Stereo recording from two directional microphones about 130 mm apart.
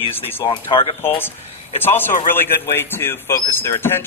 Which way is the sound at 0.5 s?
40° left (ahead or behind).